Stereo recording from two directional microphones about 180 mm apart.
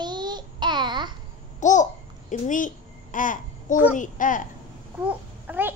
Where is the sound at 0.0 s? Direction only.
25° right (ahead or behind).